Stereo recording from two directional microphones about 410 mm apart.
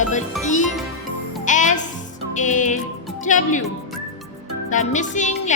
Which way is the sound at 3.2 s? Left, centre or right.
Centre.